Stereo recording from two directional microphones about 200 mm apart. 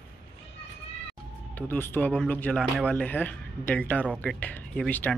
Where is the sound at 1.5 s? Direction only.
10° left (ahead or behind).